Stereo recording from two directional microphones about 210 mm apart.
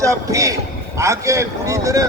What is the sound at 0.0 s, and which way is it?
A man's voice, 15° right (ahead or behind).